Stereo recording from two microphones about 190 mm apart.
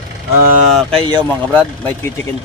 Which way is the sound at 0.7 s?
5° left (ahead or behind).